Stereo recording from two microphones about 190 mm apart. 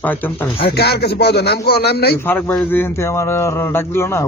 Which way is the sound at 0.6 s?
60° left (ahead or behind).